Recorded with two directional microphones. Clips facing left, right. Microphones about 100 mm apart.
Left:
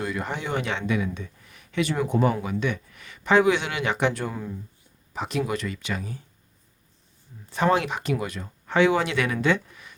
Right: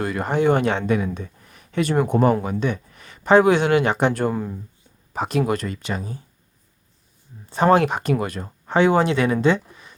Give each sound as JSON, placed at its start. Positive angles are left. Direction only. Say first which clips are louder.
{"t": 0.0, "sound": "speech", "louder": "right 9 dB", "side_deg": -50}
{"t": 7.5, "sound": "speech", "louder": "right 6 dB", "side_deg": -40}